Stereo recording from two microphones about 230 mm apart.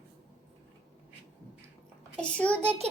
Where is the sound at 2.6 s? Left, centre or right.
Right.